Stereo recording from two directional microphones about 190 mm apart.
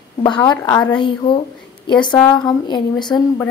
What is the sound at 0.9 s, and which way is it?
Speech, 25° left (ahead or behind).